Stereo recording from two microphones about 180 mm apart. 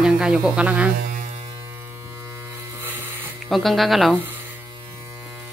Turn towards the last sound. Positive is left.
turn(degrees=-10)  # may be behind; listen again after turning